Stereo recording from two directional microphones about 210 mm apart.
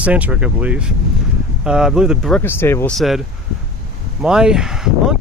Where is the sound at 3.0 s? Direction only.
Centre (ahead or behind).